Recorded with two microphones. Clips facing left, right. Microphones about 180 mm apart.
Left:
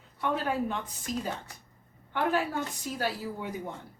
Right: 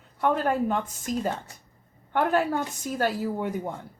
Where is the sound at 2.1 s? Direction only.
50° right (ahead or behind).